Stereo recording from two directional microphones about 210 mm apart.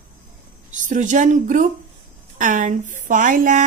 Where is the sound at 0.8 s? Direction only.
35° right (ahead or behind).